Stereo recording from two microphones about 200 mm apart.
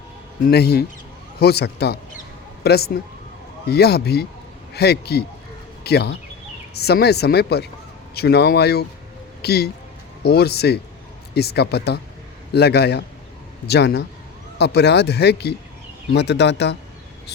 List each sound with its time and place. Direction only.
0.4 s speech: 55° left (ahead or behind)